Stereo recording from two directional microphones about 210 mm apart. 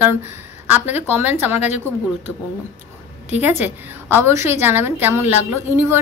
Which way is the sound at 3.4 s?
10° right (ahead or behind).